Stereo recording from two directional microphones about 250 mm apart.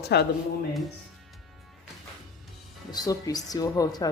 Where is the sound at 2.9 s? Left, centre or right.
Centre.